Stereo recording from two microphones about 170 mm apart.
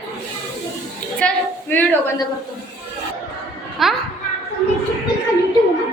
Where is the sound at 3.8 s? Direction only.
Centre (ahead or behind).